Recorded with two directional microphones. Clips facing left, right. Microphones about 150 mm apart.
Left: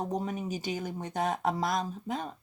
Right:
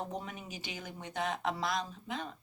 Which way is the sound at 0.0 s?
40° left (ahead or behind).